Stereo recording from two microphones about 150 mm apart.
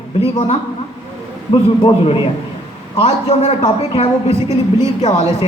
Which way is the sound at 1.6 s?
40° left (ahead or behind).